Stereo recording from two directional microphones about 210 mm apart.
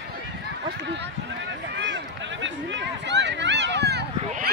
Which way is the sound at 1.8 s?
60° right (ahead or behind).